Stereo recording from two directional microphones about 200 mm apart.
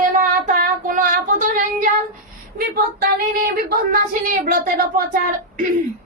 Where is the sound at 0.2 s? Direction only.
40° right (ahead or behind).